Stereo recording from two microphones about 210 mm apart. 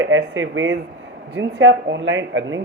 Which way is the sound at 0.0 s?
65° right (ahead or behind).